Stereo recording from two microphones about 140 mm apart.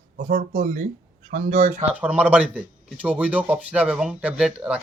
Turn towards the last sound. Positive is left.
turn(degrees=-10)  # may be behind; listen again after turning